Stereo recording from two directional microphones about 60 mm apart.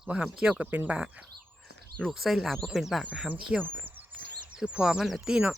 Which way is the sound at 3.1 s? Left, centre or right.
Right.